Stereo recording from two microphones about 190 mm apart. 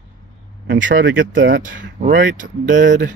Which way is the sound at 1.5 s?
45° right (ahead or behind).